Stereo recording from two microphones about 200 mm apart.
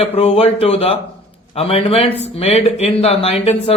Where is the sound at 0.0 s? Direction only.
30° left (ahead or behind).